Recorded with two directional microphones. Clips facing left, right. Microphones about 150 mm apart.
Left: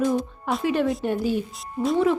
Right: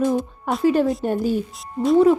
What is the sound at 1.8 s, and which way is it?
Speech, 5° left (ahead or behind).